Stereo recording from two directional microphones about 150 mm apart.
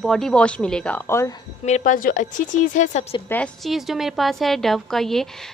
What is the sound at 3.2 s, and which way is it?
Speech, 10° left (ahead or behind).